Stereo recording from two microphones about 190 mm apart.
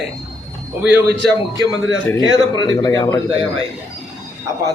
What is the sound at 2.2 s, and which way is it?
A man's voice, 20° left (ahead or behind).